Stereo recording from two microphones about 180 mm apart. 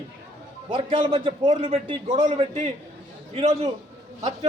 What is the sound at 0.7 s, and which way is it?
A man's voice, 30° right (ahead or behind).